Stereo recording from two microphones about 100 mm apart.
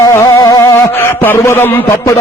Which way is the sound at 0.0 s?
30° left (ahead or behind).